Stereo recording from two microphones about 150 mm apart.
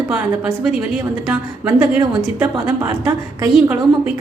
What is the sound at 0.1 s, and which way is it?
A woman's voice, 10° right (ahead or behind).